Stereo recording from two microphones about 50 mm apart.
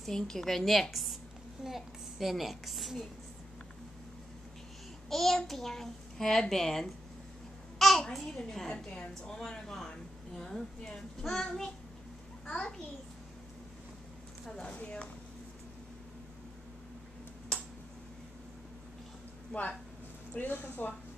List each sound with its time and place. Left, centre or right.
0.0 s a woman's voice: centre
5.1 s a child's voice: centre
14.5 s speech: centre
17.5 s a sound: centre
19.5 s speech: left